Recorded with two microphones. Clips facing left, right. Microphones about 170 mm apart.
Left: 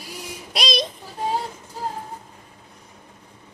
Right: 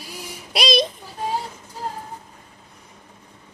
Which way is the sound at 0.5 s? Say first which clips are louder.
Right 5 dB; centre (ahead or behind).